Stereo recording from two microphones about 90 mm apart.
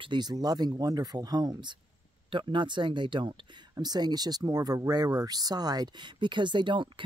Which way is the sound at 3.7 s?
50° right (ahead or behind).